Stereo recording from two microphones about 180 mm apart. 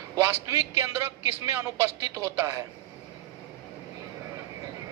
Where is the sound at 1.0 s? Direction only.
15° right (ahead or behind).